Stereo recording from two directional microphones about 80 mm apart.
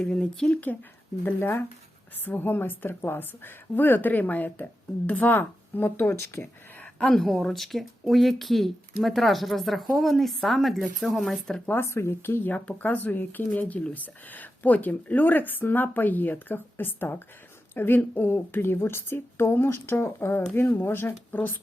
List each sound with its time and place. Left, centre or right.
0.0 s speech: centre
1.2 s speech: left
6.7 s speech: centre
11.6 s speech: left
11.9 s speech: left
12.5 s speech: centre